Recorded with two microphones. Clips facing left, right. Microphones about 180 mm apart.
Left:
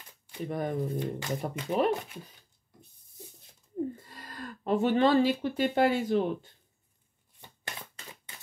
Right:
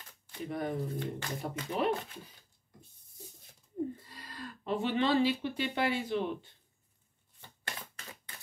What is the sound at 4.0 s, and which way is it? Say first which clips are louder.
Speech: left 3 dB; 45° left (ahead or behind).